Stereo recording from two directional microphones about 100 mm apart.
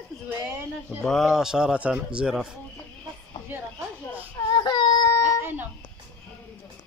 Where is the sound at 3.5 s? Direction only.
20° right (ahead or behind).